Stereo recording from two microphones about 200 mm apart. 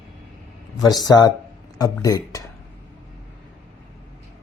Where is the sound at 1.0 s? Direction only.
20° left (ahead or behind).